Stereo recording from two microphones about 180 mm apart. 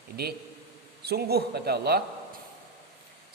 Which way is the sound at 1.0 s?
60° right (ahead or behind).